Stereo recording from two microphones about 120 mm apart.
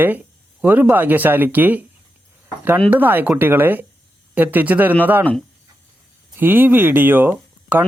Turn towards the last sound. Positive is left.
turn(degrees=-15)  # may be behind; listen again after turning